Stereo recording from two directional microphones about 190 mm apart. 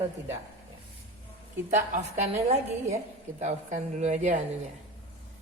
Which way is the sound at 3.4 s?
40° right (ahead or behind).